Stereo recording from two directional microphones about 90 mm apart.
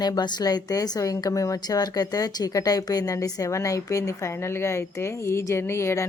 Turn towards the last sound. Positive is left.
turn(degrees=30)  # may be behind; listen again after turning